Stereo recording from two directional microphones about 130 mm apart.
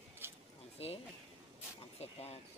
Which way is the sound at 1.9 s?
50° left (ahead or behind).